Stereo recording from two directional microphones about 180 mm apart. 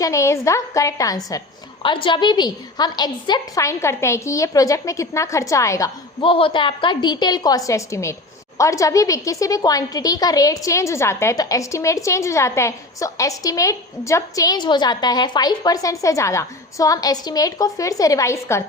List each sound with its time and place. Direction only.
0.0 s a woman's voice: 15° left (ahead or behind)
6.2 s a woman's voice: 30° left (ahead or behind)